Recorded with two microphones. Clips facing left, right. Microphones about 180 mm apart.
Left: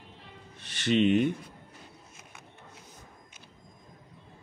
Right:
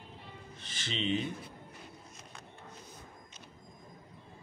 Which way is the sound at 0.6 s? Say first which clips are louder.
Left 14 dB; 65° left (ahead or behind).